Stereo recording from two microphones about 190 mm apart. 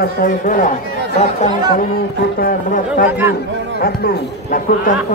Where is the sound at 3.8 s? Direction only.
55° left (ahead or behind).